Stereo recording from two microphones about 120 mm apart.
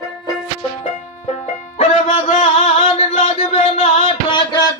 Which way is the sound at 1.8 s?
55° left (ahead or behind).